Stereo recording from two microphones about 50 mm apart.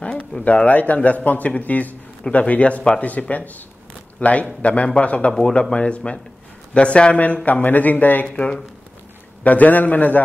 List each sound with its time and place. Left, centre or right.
0.0 s a sound: left
0.4 s speech: left
8.4 s speech: centre
9.4 s speech: left